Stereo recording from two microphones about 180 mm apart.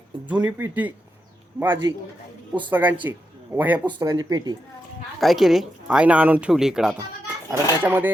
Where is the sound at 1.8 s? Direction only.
25° right (ahead or behind).